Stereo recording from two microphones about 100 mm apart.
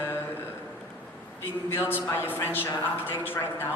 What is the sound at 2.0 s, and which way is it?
A woman's voice, 20° left (ahead or behind).